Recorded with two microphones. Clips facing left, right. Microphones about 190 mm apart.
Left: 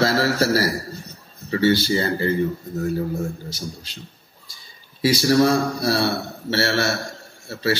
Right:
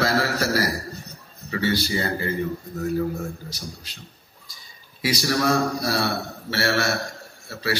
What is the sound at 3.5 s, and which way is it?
Speech, 25° left (ahead or behind).